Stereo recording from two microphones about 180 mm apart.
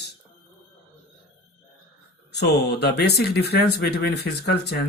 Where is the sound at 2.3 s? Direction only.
65° left (ahead or behind).